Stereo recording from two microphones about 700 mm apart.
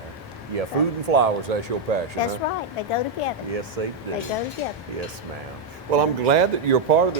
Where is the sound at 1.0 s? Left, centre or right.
Right.